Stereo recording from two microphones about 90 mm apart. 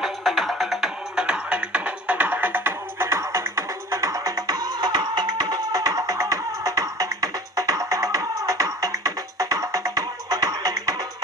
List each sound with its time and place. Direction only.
0.0 s music: centre (ahead or behind); by 11.1 s 45° right (ahead or behind)